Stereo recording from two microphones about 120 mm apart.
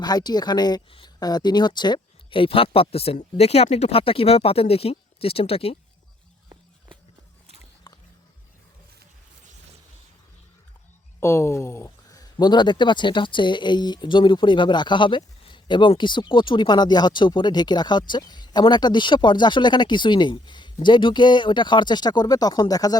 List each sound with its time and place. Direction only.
0.0 s speech: 35° left (ahead or behind)
0.9 s speech: 50° left (ahead or behind)
1.2 s speech: 35° left (ahead or behind); by 5.7 s 55° left (ahead or behind)
11.2 s speech: 20° left (ahead or behind)
12.4 s speech: 35° left (ahead or behind)